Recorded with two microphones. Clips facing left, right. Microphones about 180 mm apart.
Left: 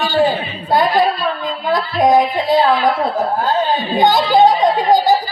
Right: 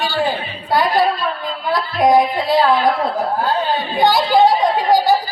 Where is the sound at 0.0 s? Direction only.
20° left (ahead or behind).